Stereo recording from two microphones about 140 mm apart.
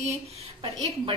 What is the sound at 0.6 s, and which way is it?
Speech, 35° right (ahead or behind).